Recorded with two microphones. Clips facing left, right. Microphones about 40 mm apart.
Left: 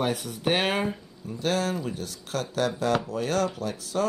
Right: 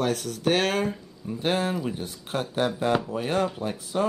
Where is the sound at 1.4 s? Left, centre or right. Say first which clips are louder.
Right 1 dB; right.